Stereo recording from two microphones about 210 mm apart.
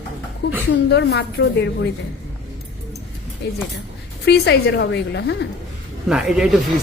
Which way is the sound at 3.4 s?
50° left (ahead or behind).